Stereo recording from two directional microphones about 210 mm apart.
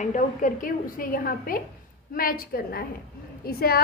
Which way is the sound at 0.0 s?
35° left (ahead or behind).